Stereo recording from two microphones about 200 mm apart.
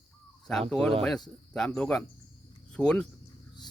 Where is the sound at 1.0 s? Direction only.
Centre (ahead or behind).